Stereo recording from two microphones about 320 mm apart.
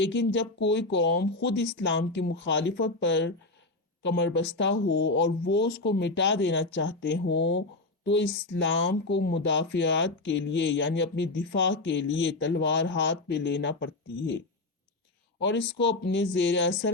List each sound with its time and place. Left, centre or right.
0.0 s speech: left